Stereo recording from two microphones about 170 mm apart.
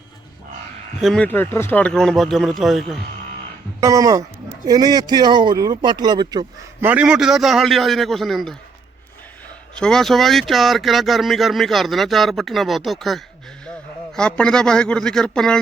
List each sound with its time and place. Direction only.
1.0 s speech: 5° left (ahead or behind)
3.8 s speech: 20° right (ahead or behind)
6.8 s speech: 10° right (ahead or behind)
9.7 s speech: 5° left (ahead or behind)